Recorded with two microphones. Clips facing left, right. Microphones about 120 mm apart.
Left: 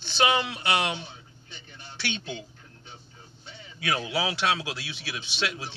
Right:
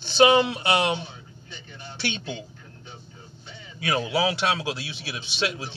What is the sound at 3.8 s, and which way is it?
Speech, 35° right (ahead or behind).